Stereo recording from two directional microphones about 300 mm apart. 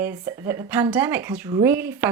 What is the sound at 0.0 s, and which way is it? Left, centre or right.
Speech, centre.